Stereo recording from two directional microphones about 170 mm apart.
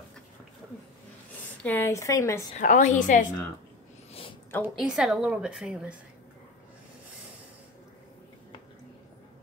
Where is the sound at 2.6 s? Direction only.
45° left (ahead or behind).